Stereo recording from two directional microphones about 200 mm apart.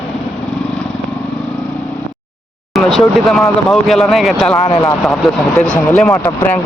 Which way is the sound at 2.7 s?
Centre (ahead or behind).